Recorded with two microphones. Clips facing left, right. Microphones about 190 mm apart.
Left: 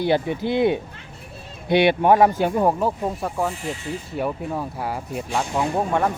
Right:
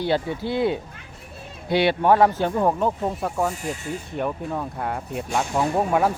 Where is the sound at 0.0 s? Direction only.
15° left (ahead or behind); by 3.5 s centre (ahead or behind).